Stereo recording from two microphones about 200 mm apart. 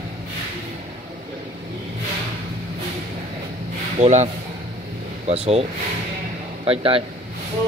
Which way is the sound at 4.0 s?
35° right (ahead or behind).